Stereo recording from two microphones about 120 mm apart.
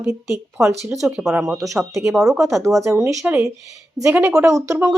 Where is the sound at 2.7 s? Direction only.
25° right (ahead or behind).